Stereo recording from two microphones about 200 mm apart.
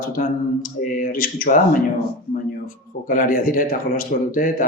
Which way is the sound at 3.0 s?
45° left (ahead or behind).